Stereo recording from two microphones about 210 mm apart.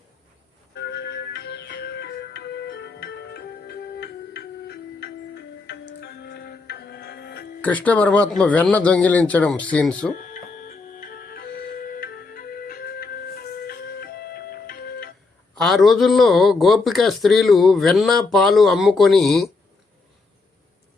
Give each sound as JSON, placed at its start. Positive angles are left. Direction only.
{"t": 0.8, "sound": "music", "side_deg": 50}
{"t": 7.6, "sound": "a man's voice", "side_deg": 5}
{"t": 10.2, "sound": "music", "side_deg": 40}
{"t": 15.5, "sound": "a man's voice", "side_deg": 0}